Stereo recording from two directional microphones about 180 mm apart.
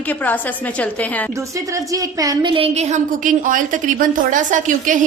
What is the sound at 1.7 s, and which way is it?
A woman's voice, 20° right (ahead or behind).